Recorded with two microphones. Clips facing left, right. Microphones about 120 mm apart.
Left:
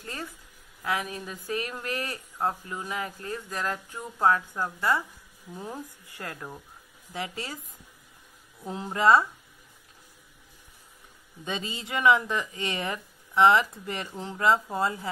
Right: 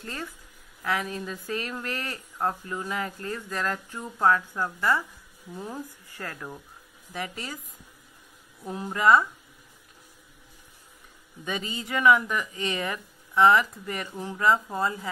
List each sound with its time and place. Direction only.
0.0 s speech: 20° left (ahead or behind)
8.6 s speech: 20° left (ahead or behind)
11.4 s speech: 20° left (ahead or behind)